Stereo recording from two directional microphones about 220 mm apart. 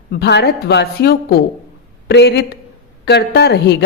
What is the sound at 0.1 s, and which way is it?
A woman's voice, 50° left (ahead or behind).